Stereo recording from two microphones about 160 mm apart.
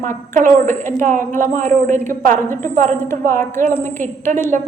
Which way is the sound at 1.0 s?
55° right (ahead or behind).